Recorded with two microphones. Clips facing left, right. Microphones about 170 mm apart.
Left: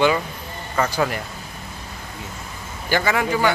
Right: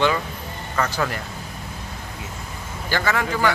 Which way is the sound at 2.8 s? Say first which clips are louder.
Left 3 dB; 15° left (ahead or behind).